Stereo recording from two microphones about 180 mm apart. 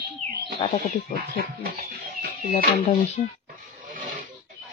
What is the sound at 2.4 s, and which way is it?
Speech, 45° left (ahead or behind).